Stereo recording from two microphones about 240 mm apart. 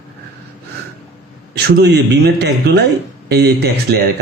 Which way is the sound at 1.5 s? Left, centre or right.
Right.